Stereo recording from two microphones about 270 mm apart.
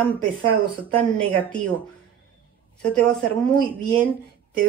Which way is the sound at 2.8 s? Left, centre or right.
Centre.